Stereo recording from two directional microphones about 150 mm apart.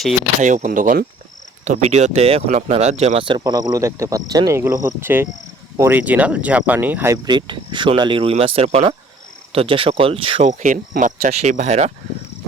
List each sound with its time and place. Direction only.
0.4 s cricket: 55° right (ahead or behind)
1.6 s speech: 50° right (ahead or behind)
3.2 s speech: 30° right (ahead or behind)
7.3 s speech: 30° right (ahead or behind)
10.4 s cricket: 60° right (ahead or behind)
11.3 s speech: 45° right (ahead or behind)